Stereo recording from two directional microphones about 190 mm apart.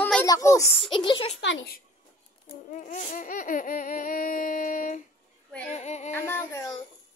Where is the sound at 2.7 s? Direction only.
40° left (ahead or behind).